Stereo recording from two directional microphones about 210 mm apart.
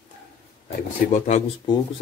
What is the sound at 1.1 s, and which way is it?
Speech, 35° left (ahead or behind).